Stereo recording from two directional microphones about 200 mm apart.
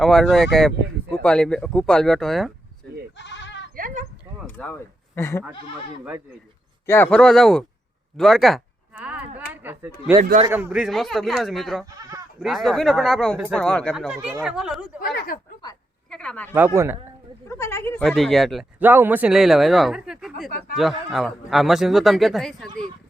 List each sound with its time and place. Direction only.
0.0 s speech: centre (ahead or behind)
3.2 s goat: 65° left (ahead or behind)
3.8 s a sound: 45° right (ahead or behind)
4.4 s speech: 10° left (ahead or behind)
6.8 s speech: 10° left (ahead or behind)
8.1 s a sound: centre (ahead or behind)
10.4 s speech: 10° right (ahead or behind)
15.0 s speech: 50° left (ahead or behind)
16.0 s speech: 5° left (ahead or behind)
16.5 s speech: 10° right (ahead or behind)
17.5 s speech: 15° left (ahead or behind)